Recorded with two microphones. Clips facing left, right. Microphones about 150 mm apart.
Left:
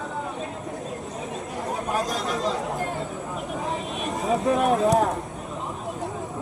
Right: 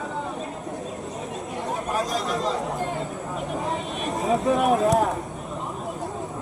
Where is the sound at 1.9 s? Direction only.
Centre (ahead or behind).